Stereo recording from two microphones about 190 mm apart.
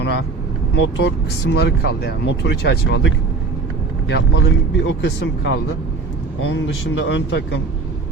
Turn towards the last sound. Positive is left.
turn(degrees=80)